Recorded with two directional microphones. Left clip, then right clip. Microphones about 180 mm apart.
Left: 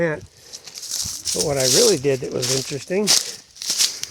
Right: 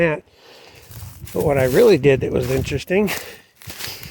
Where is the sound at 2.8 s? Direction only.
45° right (ahead or behind).